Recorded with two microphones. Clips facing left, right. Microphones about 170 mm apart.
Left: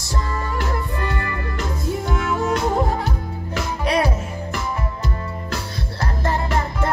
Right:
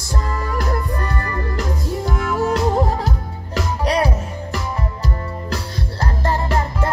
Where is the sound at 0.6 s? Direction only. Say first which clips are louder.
Right 3 dB; 35° right (ahead or behind).